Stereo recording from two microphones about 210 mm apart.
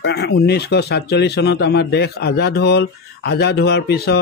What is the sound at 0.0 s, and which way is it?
Speech, 50° left (ahead or behind).